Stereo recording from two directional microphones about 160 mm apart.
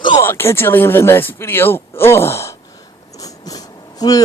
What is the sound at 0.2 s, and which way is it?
Speech, 15° left (ahead or behind).